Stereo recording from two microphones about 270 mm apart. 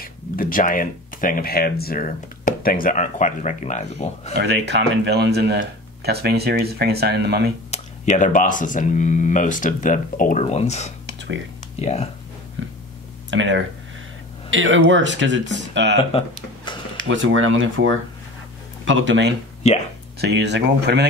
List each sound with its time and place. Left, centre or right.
0.0 s speech: left
4.4 s speech: right
7.7 s speech: left
11.1 s music: right
11.8 s speech: left
13.3 s speech: right
19.6 s speech: left
20.2 s speech: right